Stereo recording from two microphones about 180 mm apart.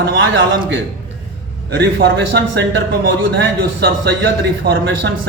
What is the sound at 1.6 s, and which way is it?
A man's voice, 75° right (ahead or behind).